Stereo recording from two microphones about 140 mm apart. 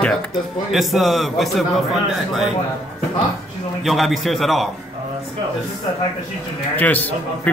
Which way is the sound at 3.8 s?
Centre (ahead or behind).